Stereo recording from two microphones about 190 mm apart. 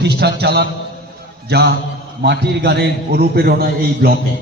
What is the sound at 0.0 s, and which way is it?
A man's voice, 60° right (ahead or behind).